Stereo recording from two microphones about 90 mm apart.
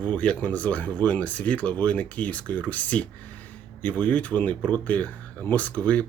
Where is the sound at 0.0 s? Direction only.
15° left (ahead or behind).